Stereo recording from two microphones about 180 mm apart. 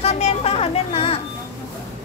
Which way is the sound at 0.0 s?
35° left (ahead or behind).